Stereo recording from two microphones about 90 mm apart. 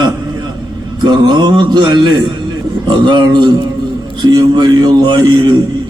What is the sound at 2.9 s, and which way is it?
Mantra, 55° right (ahead or behind).